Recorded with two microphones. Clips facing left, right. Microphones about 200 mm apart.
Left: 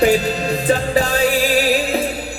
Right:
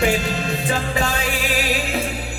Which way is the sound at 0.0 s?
35° left (ahead or behind).